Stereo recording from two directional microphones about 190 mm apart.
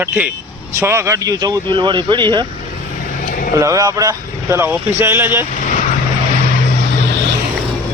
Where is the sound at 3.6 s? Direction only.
15° right (ahead or behind).